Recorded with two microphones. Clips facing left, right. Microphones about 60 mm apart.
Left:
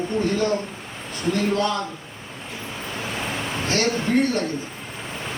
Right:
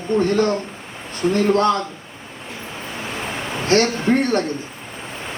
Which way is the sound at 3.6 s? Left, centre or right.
Right.